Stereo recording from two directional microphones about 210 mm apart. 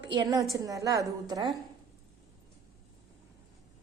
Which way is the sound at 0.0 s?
20° right (ahead or behind).